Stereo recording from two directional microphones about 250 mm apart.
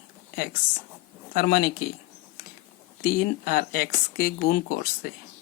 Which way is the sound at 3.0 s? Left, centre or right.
Left.